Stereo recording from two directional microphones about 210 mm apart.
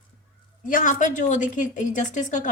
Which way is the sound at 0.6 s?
40° left (ahead or behind).